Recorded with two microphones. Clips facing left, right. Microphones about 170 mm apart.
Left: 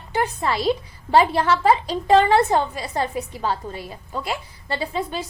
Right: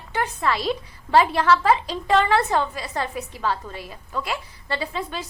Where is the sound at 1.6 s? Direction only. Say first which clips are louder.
Left 2 dB; 35° left (ahead or behind).